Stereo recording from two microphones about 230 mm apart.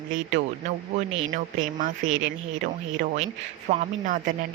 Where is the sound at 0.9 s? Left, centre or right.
Right.